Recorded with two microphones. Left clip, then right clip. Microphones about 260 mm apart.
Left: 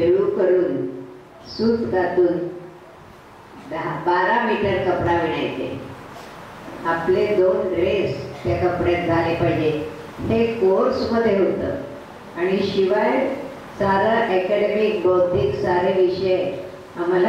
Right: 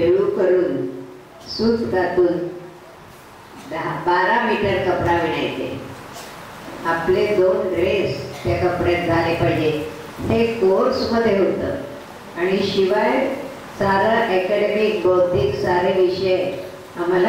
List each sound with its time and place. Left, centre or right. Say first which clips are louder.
0.0 s a sound: right 1 dB; centre
1.6 s speech: right 1 dB; centre
3.7 s a man's voice: right 1 dB; centre
6.8 s a man's voice: right 1 dB; centre